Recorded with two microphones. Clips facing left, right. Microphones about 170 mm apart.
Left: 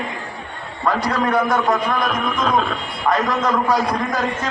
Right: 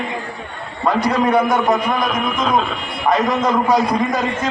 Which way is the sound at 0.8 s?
10° right (ahead or behind).